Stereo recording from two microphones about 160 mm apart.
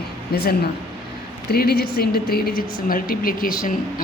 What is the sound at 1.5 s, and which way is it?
A woman's voice, 75° left (ahead or behind).